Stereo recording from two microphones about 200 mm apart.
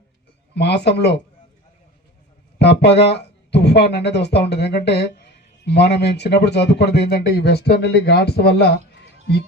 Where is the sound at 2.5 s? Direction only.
55° left (ahead or behind).